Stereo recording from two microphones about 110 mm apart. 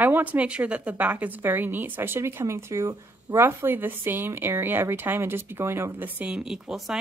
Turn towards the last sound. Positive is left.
turn(degrees=-5)  # may be behind; listen again after turning